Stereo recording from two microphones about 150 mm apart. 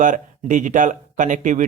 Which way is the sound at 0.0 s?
60° right (ahead or behind).